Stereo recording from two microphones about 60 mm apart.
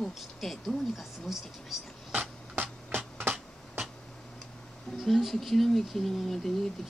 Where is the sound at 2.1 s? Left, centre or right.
Right.